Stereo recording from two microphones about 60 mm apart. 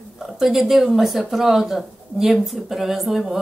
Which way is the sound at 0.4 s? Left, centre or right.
Centre.